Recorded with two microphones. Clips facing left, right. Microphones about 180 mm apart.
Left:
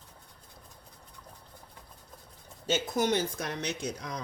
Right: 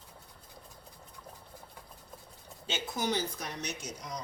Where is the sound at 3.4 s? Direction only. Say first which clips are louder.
Left 5 dB; 90° left.